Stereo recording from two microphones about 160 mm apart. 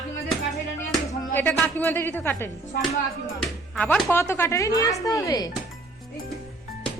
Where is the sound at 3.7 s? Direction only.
10° left (ahead or behind).